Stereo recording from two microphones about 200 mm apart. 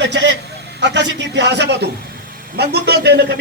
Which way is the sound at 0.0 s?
60° right (ahead or behind).